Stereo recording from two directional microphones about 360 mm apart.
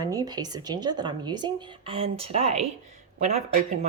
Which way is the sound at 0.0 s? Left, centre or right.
Centre.